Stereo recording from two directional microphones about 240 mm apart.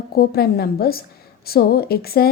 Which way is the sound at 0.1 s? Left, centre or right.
Left.